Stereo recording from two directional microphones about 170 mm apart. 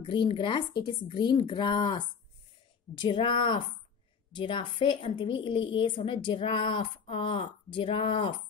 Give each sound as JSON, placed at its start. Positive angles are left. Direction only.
{"t": 0.0, "sound": "speech", "side_deg": 30}